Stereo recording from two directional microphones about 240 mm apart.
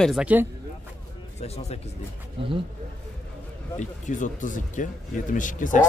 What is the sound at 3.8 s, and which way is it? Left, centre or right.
Speech, left.